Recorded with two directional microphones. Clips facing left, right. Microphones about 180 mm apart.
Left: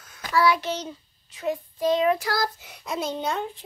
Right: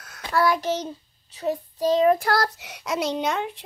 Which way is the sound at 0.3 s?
50° right (ahead or behind).